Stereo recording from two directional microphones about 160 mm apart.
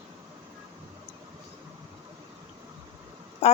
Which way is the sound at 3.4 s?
40° left (ahead or behind).